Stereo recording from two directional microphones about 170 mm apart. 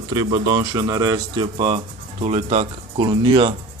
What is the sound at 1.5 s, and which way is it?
A man's voice, 35° right (ahead or behind).